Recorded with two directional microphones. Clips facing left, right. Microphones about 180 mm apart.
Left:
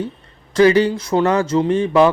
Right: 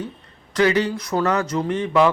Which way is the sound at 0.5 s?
30° left (ahead or behind).